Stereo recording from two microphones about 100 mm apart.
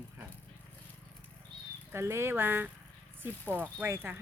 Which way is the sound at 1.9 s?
25° right (ahead or behind).